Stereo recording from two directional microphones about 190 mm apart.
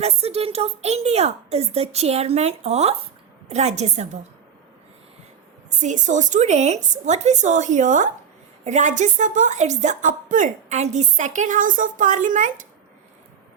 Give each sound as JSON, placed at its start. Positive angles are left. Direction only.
{"t": 0.0, "sound": "a woman's voice", "side_deg": -35}
{"t": 5.8, "sound": "a woman's voice", "side_deg": -40}